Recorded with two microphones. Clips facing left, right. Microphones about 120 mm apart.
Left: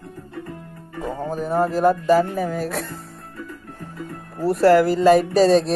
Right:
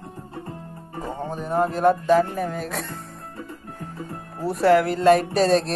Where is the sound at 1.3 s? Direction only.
Centre (ahead or behind).